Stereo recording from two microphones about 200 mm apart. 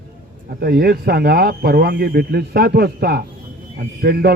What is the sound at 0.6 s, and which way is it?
A man's voice, 50° right (ahead or behind).